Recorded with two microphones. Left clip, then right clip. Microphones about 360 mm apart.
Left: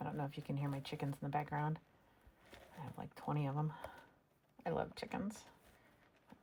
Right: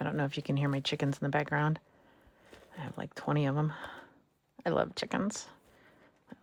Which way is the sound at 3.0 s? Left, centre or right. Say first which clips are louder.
Right 10 dB; right.